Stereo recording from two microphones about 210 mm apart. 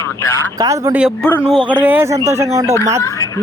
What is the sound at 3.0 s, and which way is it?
Speech, 15° left (ahead or behind).